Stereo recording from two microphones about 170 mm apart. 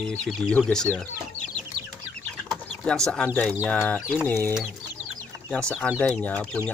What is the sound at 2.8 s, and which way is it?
Speech, 5° left (ahead or behind).